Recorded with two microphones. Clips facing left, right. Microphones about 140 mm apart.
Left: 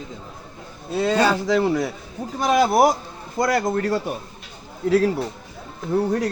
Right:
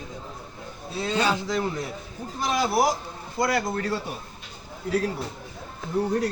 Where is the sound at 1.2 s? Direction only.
80° left.